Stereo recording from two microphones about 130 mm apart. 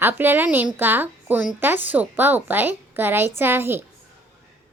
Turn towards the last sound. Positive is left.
turn(degrees=-15)  # may be behind; listen again after turning